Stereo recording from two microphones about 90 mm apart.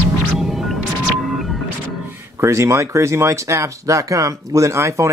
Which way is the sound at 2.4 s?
30° right (ahead or behind).